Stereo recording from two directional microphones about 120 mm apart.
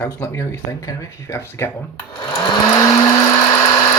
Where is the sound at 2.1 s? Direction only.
45° left (ahead or behind).